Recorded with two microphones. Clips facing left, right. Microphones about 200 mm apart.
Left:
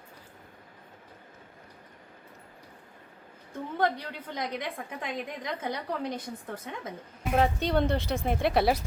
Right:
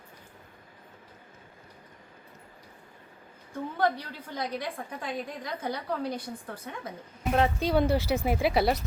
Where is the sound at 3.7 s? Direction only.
20° left (ahead or behind).